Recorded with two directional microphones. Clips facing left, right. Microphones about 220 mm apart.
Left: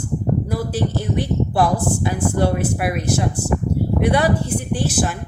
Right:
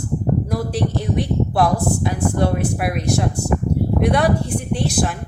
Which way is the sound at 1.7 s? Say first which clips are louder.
Right 1 dB; 60° right (ahead or behind).